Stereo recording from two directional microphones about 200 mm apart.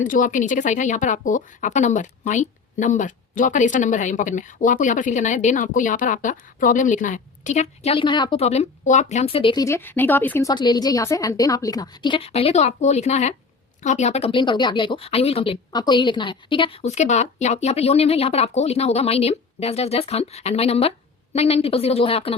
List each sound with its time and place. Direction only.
0.0 s speech: 40° left (ahead or behind); by 10.5 s 10° left (ahead or behind)
10.5 s a woman's voice: 20° left (ahead or behind)